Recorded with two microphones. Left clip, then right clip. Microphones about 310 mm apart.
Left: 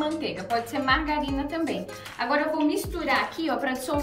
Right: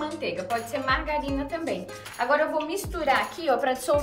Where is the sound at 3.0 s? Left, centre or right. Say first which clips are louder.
Right 3 dB; right.